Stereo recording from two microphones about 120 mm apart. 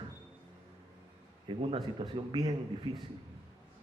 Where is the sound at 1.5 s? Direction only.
45° right (ahead or behind).